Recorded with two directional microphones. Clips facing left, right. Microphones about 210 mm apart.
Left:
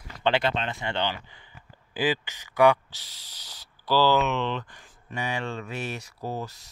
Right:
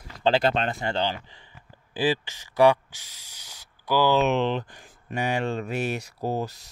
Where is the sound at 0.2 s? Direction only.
40° right (ahead or behind).